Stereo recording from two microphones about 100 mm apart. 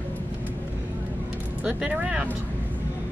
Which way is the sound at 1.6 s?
10° right (ahead or behind).